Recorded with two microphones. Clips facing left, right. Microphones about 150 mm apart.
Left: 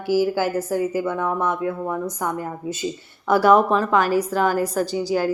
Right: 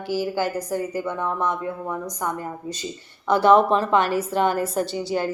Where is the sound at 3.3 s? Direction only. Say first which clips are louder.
Left 1 dB; 5° left (ahead or behind).